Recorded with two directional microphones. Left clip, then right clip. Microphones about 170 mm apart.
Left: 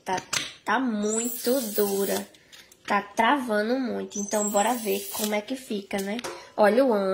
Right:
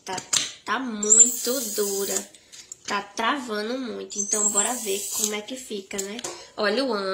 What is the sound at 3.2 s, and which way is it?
Speech, 50° left (ahead or behind).